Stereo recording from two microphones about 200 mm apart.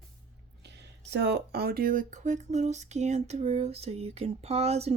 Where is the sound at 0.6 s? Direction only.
60° right (ahead or behind).